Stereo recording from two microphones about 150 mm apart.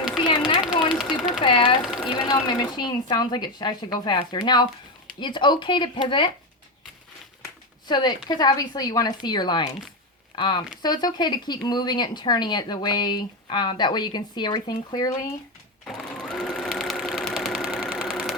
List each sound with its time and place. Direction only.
0.2 s sewing machine: 30° left (ahead or behind)
0.9 s sewing machine: 5° right (ahead or behind)
1.4 s sewing machine: 35° left (ahead or behind)
1.8 s sewing machine: 5° right (ahead or behind)
2.1 s speech: 30° left (ahead or behind)
7.9 s speech: 30° left (ahead or behind)
15.9 s sewing machine: 5° left (ahead or behind)